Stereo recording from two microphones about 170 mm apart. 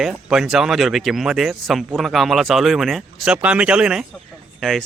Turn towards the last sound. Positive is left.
turn(degrees=0)  # may be behind; listen again after turning